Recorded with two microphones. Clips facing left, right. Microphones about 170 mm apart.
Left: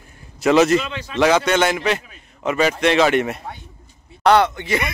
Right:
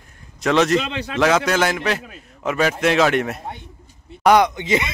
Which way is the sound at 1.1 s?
Centre (ahead or behind).